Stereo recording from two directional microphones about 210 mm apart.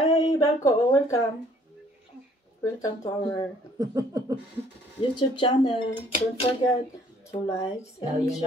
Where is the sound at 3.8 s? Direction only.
15° right (ahead or behind).